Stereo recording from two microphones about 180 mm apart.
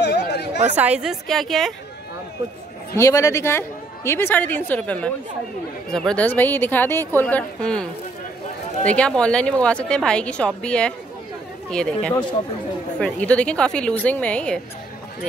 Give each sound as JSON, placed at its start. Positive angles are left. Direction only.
{"t": 0.0, "sound": "a sound", "side_deg": 65}
{"t": 0.7, "sound": "a woman's voice", "side_deg": -5}
{"t": 3.0, "sound": "a woman's voice", "side_deg": 15}